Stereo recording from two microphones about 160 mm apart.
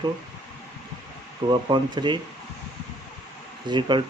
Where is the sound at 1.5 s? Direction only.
30° right (ahead or behind).